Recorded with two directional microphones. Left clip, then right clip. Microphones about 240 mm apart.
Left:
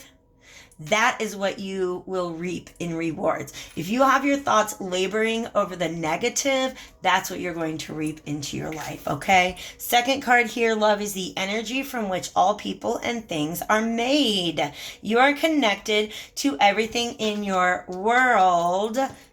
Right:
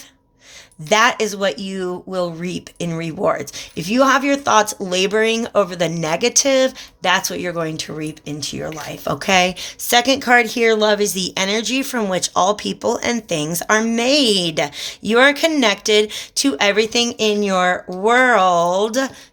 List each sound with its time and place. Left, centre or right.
0.9 s speech: right